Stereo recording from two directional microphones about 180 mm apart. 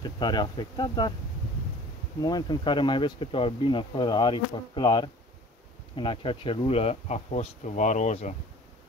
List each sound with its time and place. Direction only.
0.0 s speech: 25° left (ahead or behind)
2.2 s speech: 25° left (ahead or behind); by 8.4 s 40° left (ahead or behind)